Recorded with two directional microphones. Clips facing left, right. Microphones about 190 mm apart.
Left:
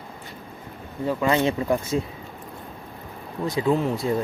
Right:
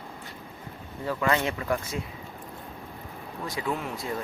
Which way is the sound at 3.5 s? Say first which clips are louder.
Left 10 dB; 25° left (ahead or behind).